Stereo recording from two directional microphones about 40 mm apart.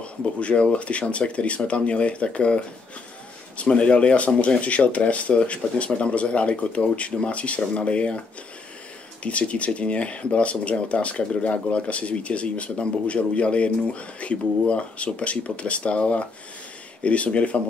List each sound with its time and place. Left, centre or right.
0.0 s speech: left
9.2 s speech: left